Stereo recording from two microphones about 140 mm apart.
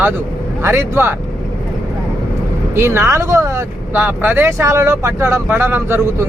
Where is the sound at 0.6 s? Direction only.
20° right (ahead or behind).